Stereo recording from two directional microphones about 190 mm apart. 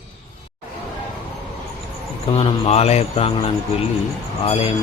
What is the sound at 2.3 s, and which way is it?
A man's voice, 35° left (ahead or behind).